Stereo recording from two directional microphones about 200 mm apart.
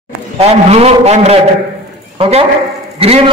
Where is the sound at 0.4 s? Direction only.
30° right (ahead or behind).